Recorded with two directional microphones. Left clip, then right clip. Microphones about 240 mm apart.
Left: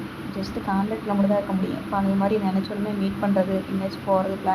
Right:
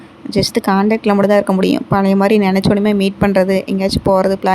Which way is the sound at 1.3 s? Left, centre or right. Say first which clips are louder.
Right 12 dB; right.